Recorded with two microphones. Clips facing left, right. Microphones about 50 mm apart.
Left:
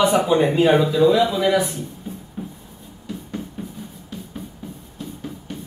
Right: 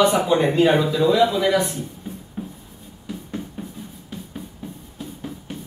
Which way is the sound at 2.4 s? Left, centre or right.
Centre.